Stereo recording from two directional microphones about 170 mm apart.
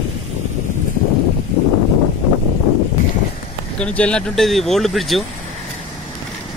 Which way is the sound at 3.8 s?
5° left (ahead or behind).